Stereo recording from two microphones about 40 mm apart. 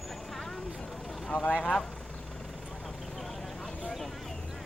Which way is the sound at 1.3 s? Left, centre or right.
Left.